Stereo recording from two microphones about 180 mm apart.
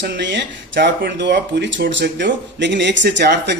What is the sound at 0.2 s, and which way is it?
Speech, 80° right.